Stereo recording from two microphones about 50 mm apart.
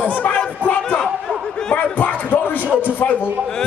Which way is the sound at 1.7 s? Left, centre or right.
Left.